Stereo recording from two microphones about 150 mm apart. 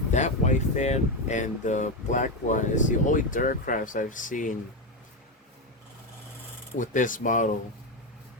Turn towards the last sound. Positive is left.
turn(degrees=60)  # may be behind; listen again after turning